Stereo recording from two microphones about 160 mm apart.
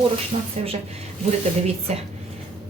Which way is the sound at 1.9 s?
40° right (ahead or behind).